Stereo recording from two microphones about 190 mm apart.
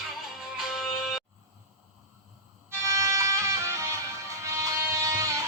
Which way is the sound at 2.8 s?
15° right (ahead or behind).